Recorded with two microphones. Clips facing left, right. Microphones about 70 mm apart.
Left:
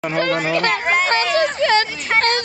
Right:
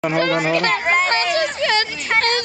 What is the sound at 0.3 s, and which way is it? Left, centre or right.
Speech, centre.